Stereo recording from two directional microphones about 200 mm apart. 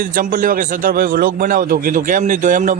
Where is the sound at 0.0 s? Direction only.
45° right (ahead or behind).